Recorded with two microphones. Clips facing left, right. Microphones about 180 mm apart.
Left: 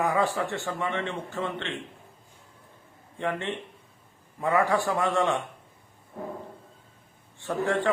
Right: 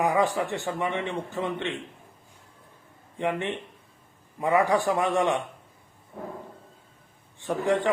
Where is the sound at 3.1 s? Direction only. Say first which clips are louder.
Right 2 dB; 15° right (ahead or behind).